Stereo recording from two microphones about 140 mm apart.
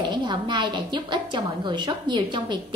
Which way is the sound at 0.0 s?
30° right (ahead or behind).